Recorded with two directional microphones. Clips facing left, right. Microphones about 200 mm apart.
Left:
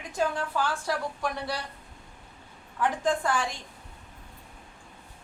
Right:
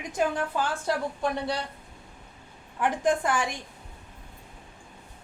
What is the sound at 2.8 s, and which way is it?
Speech, 20° right (ahead or behind).